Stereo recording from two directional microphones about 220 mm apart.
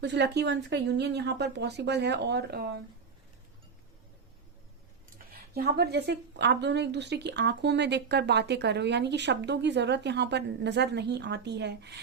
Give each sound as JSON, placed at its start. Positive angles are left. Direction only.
{"t": 0.0, "sound": "speech", "side_deg": -50}
{"t": 5.1, "sound": "speech", "side_deg": -45}